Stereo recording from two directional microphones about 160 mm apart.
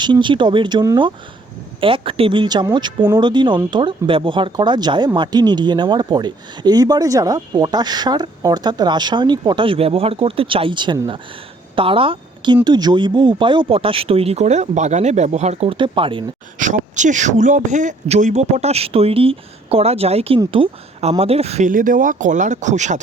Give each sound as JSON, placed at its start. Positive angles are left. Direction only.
{"t": 0.0, "sound": "speech", "side_deg": -30}
{"t": 16.6, "sound": "speech", "side_deg": -50}
{"t": 21.7, "sound": "speech", "side_deg": -55}